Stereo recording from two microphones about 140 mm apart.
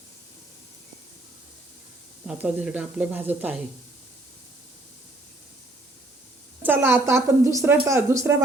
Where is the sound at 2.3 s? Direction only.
10° right (ahead or behind).